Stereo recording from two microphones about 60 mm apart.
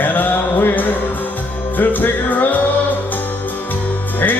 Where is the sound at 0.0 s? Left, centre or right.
Left.